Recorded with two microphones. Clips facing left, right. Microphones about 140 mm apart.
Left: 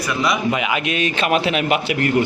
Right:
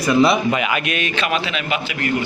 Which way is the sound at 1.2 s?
50° left (ahead or behind).